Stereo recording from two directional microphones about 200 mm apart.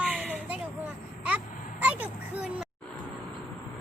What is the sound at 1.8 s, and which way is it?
Speech, 10° right (ahead or behind).